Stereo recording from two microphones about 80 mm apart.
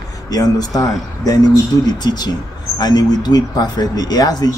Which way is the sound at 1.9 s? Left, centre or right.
Left.